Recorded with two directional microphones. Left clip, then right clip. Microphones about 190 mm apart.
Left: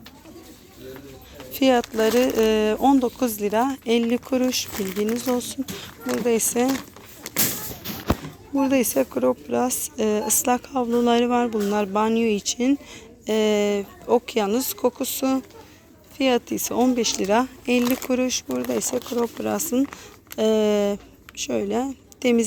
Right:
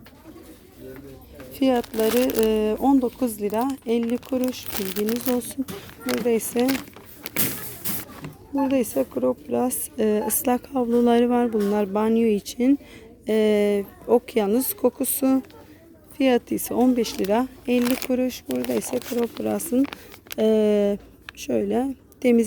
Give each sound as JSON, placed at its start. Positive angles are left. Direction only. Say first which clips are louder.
{"t": 1.5, "sound": "speech", "louder": "left 3 dB", "side_deg": -10}
{"t": 4.8, "sound": "speech", "louder": "right 3 dB", "side_deg": -45}
{"t": 5.4, "sound": "speech", "louder": "left 1 dB", "side_deg": -25}
{"t": 8.6, "sound": "speech", "louder": "left 2 dB", "side_deg": -5}
{"t": 9.5, "sound": "a woman's voice", "louder": "left 1 dB", "side_deg": -20}